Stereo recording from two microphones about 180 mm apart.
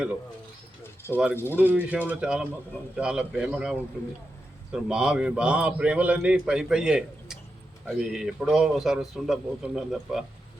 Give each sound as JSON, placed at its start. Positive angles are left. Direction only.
{"t": 1.1, "sound": "a man's voice", "side_deg": -10}